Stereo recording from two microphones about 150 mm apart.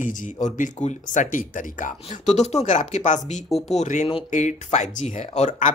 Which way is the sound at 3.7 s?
55° left (ahead or behind).